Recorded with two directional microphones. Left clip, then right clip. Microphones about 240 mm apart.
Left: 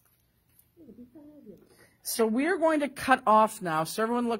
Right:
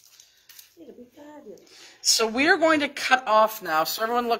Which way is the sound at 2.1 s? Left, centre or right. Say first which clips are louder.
Right 4 dB; left.